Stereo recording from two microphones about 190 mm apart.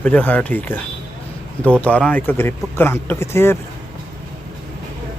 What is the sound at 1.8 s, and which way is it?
Speech, 10° left (ahead or behind).